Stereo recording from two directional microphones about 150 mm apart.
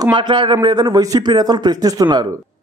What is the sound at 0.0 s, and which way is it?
A man's voice, 30° right (ahead or behind).